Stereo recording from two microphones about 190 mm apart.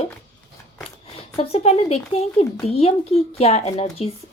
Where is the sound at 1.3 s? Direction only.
30° left (ahead or behind).